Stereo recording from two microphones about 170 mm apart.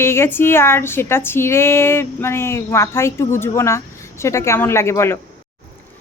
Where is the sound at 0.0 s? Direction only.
15° left (ahead or behind).